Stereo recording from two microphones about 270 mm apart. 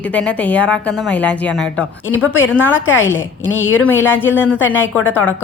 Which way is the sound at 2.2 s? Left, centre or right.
Left.